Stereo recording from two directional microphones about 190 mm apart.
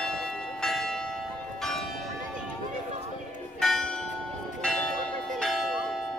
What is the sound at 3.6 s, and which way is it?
Church bell, centre (ahead or behind).